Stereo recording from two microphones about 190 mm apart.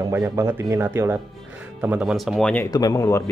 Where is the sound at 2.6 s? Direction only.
20° left (ahead or behind).